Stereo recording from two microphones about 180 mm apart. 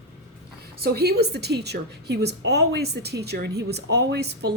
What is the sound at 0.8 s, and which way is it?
A woman's voice, 60° right (ahead or behind).